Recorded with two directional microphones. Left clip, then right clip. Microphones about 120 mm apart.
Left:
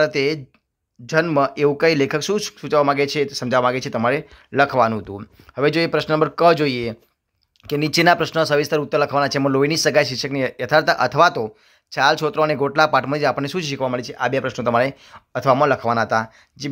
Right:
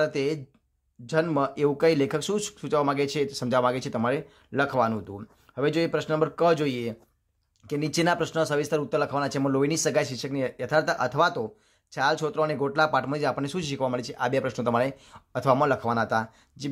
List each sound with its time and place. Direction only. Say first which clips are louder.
0.0 s a man's voice: left 7 dB; 20° left (ahead or behind)